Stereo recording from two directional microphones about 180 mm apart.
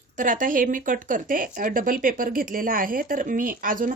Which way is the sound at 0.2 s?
45° right (ahead or behind).